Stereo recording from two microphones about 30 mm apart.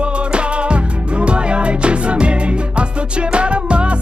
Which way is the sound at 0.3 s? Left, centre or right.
Right.